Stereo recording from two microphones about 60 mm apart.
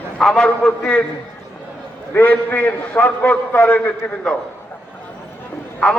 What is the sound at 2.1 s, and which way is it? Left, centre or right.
A man's voice, left.